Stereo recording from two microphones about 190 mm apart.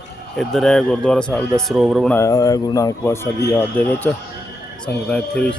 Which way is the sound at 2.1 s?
15° left (ahead or behind).